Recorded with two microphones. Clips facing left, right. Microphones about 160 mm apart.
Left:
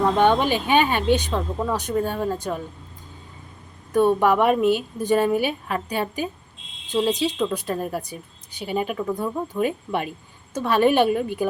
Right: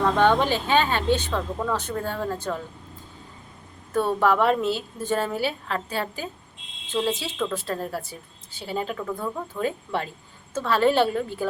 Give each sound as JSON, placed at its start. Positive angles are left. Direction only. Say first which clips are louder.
{"t": 0.0, "sound": "speech", "louder": "left 2 dB", "side_deg": 15}
{"t": 3.9, "sound": "speech", "louder": "left 4 dB", "side_deg": 15}